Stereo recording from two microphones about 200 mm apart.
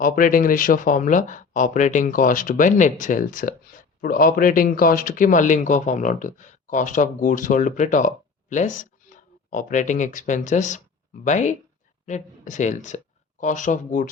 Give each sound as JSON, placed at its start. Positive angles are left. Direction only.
{"t": 0.0, "sound": "speech", "side_deg": 45}